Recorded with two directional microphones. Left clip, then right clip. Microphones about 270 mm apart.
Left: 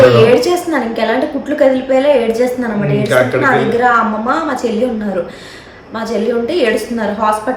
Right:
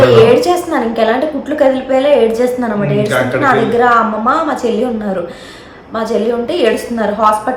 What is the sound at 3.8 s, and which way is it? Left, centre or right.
Speech, centre.